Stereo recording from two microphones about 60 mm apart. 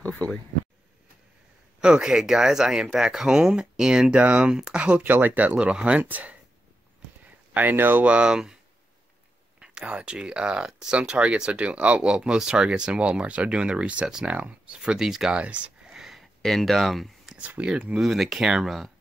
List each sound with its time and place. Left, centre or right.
1.8 s speech: centre
4.2 s speech: right
4.5 s speech: centre
5.0 s speech: right
7.5 s speech: right
9.6 s speech: centre
11.0 s speech: right
15.3 s a sound: right
16.0 s a sound: centre
17.4 s speech: right
18.0 s speech: centre